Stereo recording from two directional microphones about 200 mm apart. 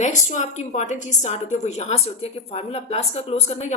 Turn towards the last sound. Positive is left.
turn(degrees=35)  # may be behind; listen again after turning